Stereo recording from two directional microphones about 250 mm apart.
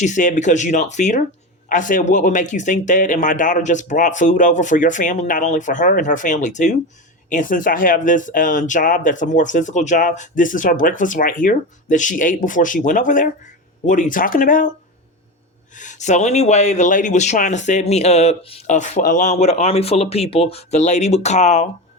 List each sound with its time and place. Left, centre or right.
0.0 s speech: left
15.8 s speech: left